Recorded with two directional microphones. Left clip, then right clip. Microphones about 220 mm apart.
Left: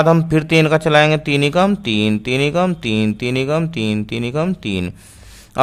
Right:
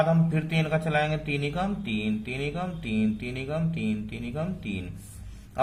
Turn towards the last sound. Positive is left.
turn(degrees=50)  # may be behind; listen again after turning